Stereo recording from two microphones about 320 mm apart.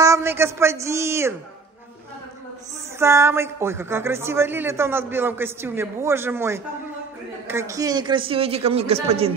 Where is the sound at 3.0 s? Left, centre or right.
Centre.